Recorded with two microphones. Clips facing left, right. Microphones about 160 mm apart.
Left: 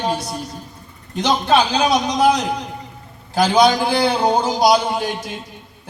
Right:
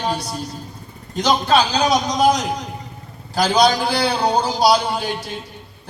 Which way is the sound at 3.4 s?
55° left (ahead or behind).